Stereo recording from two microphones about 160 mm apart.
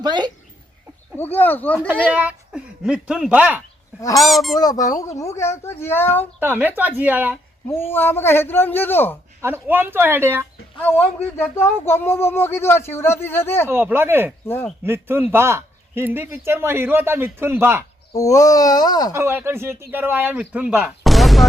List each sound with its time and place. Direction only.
0.0 s speech: 25° right (ahead or behind)
1.1 s speech: 10° left (ahead or behind)
1.9 s speech: 10° right (ahead or behind)
4.6 s speech: 25° left (ahead or behind)
6.4 s a man's voice: 10° right (ahead or behind)
7.7 s speech: 15° left (ahead or behind)
9.4 s a man's voice: 15° right (ahead or behind)
10.8 s speech: 10° left (ahead or behind)
13.7 s a man's voice: 15° right (ahead or behind)
14.4 s speech: 15° left (ahead or behind)
14.8 s a man's voice: 15° right (ahead or behind)
18.2 s speech: 20° left (ahead or behind)
19.1 s a man's voice: 15° right (ahead or behind); by 21.4 s centre (ahead or behind)